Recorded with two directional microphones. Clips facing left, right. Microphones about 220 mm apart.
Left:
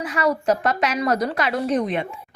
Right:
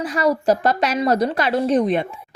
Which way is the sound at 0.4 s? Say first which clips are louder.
Right 3 dB; 35° right (ahead or behind).